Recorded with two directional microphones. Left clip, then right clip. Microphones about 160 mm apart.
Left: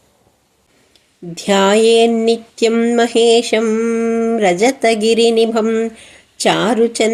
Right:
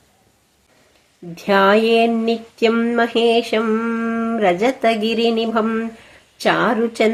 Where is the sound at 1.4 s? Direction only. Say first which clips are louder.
Left 2 dB; 35° left (ahead or behind).